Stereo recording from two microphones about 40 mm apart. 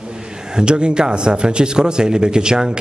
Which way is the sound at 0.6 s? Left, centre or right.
Right.